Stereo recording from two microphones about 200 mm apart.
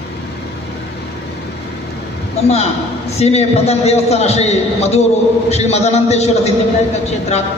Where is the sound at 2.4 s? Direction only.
30° left (ahead or behind).